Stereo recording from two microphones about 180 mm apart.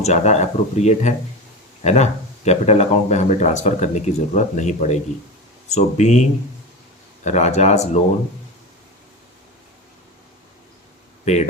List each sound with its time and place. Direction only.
0.0 s speech: 40° left (ahead or behind)
7.3 s speech: 40° left (ahead or behind)